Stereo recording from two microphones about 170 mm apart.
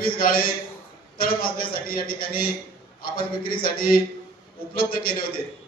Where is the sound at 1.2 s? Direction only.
60° left (ahead or behind).